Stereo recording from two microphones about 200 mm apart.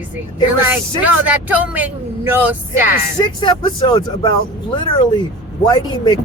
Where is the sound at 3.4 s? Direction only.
25° left (ahead or behind).